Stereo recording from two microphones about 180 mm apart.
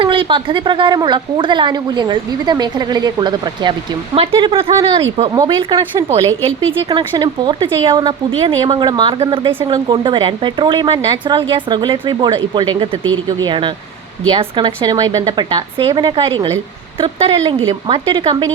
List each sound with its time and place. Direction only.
0.0 s a woman's voice: 30° right (ahead or behind)